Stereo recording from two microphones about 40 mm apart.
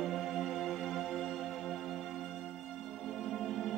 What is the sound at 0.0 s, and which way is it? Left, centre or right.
Music, centre.